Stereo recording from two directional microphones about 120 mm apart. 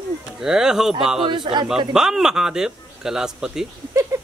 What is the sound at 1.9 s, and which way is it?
A man's voice, 5° right (ahead or behind).